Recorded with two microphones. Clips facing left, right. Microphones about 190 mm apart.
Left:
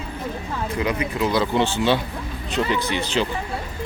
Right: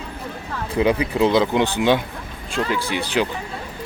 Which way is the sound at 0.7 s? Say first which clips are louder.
Right 6 dB; 30° right (ahead or behind).